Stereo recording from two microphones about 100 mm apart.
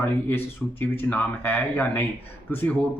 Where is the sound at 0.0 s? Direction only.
20° left (ahead or behind).